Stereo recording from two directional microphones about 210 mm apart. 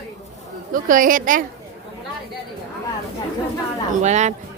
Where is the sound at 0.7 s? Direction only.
40° right (ahead or behind).